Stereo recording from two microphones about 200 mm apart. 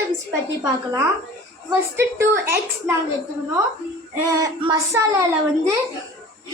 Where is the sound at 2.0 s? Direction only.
10° right (ahead or behind).